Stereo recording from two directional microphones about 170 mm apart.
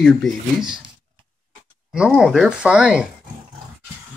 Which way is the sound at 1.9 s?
5° right (ahead or behind).